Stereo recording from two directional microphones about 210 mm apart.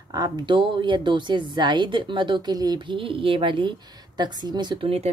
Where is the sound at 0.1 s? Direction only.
20° right (ahead or behind).